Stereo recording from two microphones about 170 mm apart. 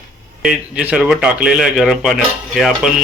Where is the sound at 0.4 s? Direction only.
5° right (ahead or behind).